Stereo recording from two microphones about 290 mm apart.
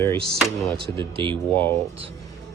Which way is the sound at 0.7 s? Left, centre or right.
Centre.